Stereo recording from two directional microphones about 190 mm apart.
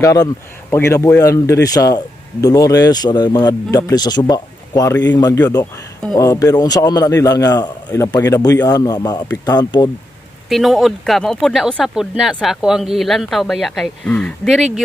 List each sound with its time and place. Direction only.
0.0 s a man's voice: 15° left (ahead or behind)
10.5 s speech: centre (ahead or behind)